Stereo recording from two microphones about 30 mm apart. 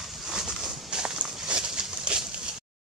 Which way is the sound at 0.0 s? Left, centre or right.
Centre.